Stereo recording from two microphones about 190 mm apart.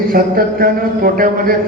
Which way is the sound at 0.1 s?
50° right (ahead or behind).